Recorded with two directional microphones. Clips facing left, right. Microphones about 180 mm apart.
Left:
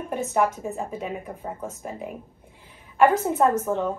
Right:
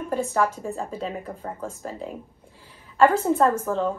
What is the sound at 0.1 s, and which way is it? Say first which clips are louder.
A woman's voice: even; 20° left (ahead or behind).